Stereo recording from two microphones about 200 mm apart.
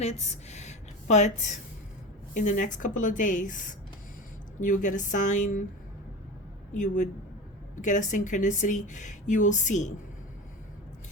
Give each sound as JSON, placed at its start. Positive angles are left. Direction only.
{"t": 0.0, "sound": "a woman's voice", "side_deg": 35}
{"t": 6.7, "sound": "speech", "side_deg": 40}